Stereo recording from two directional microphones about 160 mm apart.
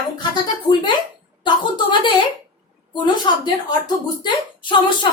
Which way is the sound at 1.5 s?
30° left (ahead or behind).